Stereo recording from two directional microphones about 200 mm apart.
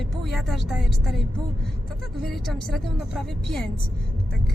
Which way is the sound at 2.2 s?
Centre (ahead or behind).